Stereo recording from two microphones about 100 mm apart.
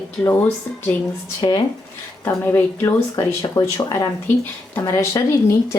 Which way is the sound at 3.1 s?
35° left (ahead or behind).